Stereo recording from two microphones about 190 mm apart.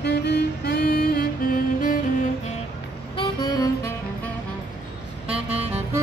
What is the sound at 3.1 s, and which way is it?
Music, 20° left (ahead or behind).